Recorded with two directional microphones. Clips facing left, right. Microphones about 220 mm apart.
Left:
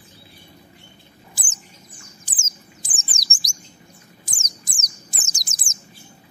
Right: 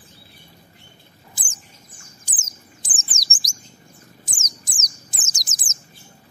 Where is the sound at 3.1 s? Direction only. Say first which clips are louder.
Even; 60° left (ahead or behind).